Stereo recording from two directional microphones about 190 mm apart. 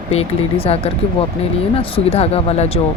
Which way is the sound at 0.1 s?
30° left (ahead or behind).